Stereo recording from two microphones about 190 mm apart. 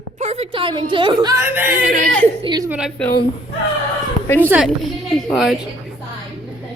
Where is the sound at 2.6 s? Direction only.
5° right (ahead or behind).